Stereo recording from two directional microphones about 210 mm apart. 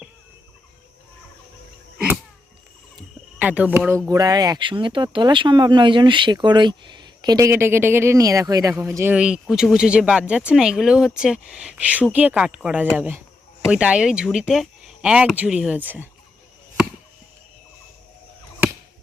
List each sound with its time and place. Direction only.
3.3 s speech: 5° right (ahead or behind)